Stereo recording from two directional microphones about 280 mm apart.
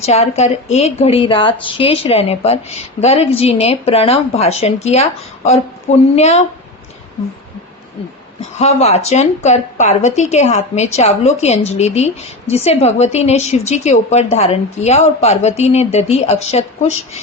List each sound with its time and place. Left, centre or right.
0.0 s a woman's voice: left
8.5 s a woman's voice: left